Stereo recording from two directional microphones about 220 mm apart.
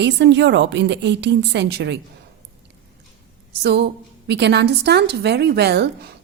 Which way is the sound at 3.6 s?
50° right (ahead or behind).